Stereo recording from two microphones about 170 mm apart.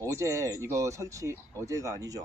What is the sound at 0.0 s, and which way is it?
Speech, 20° right (ahead or behind).